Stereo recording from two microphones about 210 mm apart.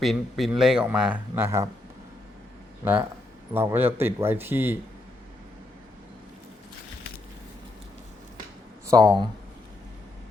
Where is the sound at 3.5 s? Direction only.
10° right (ahead or behind).